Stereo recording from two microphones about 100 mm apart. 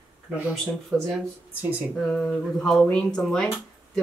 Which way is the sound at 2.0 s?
5° left (ahead or behind).